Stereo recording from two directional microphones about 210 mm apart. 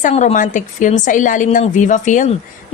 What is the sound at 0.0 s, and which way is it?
Speech, 30° left (ahead or behind).